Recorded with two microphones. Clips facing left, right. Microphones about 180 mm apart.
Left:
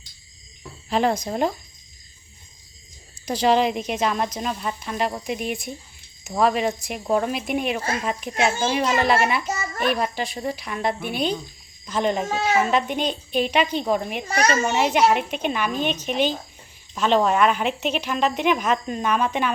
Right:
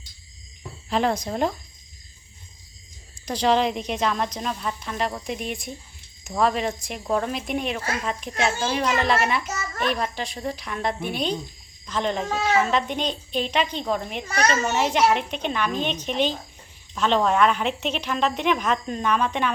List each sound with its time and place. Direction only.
0.9 s a woman's voice: centre (ahead or behind)
3.2 s a woman's voice: 5° left (ahead or behind)
14.3 s a child's voice: 30° left (ahead or behind)
14.5 s a woman's voice: 10° left (ahead or behind)